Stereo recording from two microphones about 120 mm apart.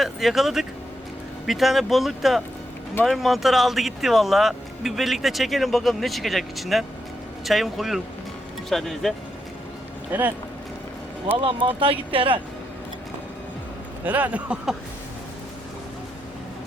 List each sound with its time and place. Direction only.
0.0 s speech: centre (ahead or behind)
10.1 s speech: 15° right (ahead or behind)
11.8 s speech: 50° right (ahead or behind)
14.0 s speech: 15° right (ahead or behind)